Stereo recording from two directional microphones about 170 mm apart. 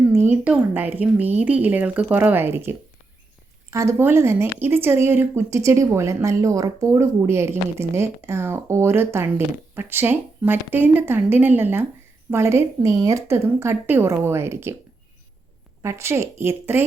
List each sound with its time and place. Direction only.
0.1 s speech: 15° right (ahead or behind)
15.8 s speech: 15° right (ahead or behind)